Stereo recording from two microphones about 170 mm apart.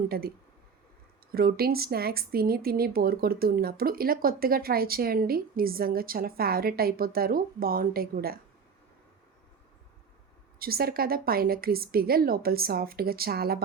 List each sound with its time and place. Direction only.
0.1 s speech: 65° right (ahead or behind)
10.6 s speech: 65° right (ahead or behind)